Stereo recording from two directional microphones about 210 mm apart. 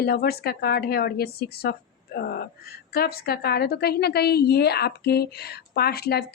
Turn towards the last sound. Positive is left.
turn(degrees=50)  # may be behind; listen again after turning